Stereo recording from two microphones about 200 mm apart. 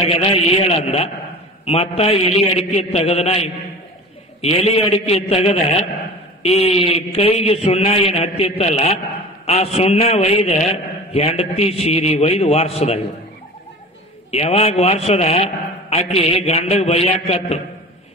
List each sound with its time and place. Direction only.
0.2 s a man's voice: 30° left (ahead or behind)
14.3 s a man's voice: 30° left (ahead or behind)